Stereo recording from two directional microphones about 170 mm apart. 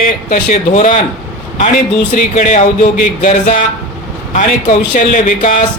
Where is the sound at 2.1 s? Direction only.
50° left (ahead or behind).